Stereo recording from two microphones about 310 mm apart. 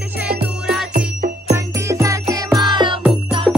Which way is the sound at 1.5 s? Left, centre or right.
Centre.